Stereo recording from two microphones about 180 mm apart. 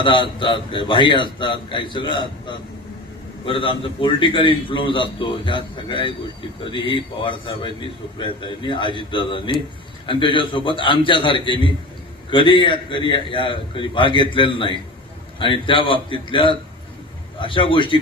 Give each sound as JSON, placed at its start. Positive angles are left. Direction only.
{"t": 0.0, "sound": "a man's voice", "side_deg": 25}